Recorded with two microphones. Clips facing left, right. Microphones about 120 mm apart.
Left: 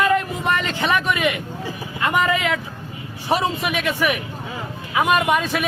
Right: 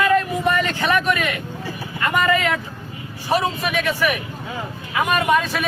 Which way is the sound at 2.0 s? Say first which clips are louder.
Right 1 dB; 15° left (ahead or behind).